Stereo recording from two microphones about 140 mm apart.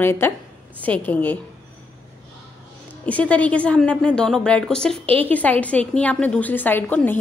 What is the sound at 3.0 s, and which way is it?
A woman's voice, 10° left (ahead or behind).